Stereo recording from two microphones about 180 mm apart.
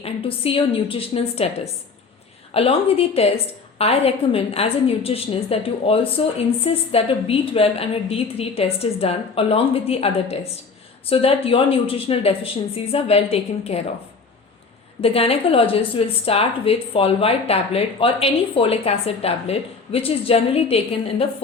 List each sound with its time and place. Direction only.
0.0 s a woman's voice: 30° left (ahead or behind)
2.5 s a woman's voice: 30° left (ahead or behind)
15.0 s a woman's voice: 30° left (ahead or behind)